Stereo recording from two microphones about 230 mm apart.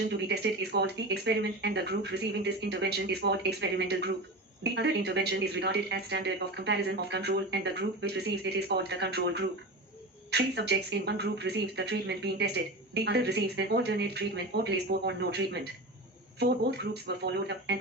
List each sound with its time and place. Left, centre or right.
0.1 s speech: right